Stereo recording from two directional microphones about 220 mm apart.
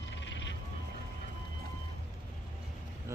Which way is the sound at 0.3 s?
55° left (ahead or behind).